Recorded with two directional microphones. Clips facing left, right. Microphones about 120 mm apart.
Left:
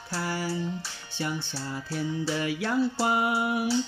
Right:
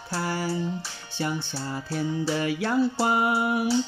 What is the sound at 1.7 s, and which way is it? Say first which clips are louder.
Music: right 3 dB; 40° right (ahead or behind).